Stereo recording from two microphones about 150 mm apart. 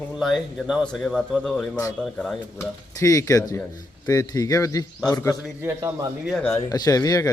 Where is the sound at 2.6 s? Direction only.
20° left (ahead or behind).